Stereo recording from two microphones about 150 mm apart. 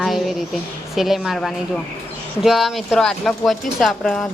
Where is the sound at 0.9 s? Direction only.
Centre (ahead or behind).